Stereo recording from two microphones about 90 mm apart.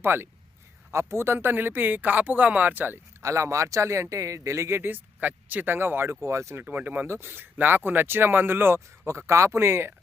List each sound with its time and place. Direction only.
0.0 s speech: 25° right (ahead or behind)